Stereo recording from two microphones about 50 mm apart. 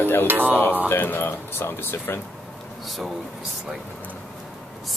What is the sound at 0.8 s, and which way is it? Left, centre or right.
Speech, left.